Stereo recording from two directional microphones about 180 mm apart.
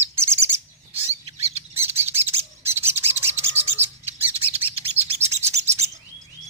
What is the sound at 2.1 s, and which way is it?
Bird, 35° right (ahead or behind).